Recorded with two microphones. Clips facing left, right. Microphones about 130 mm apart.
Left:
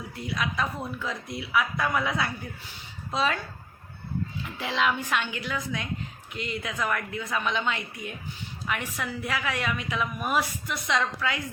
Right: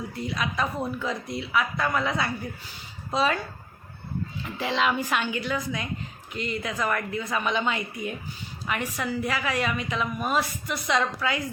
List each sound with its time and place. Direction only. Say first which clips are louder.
0.1 s a woman's voice: right 1 dB; centre (ahead or behind)
4.4 s a woman's voice: right 2 dB; centre (ahead or behind)